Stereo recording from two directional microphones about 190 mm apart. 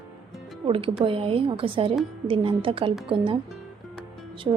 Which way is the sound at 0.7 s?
30° right (ahead or behind).